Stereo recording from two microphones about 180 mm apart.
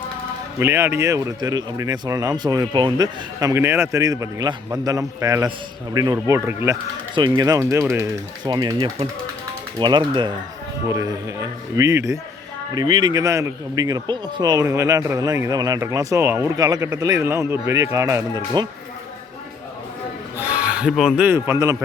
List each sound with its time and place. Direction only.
0.6 s speech: 15° right (ahead or behind)
7.2 s speech: 25° right (ahead or behind)
20.4 s speech: 10° right (ahead or behind)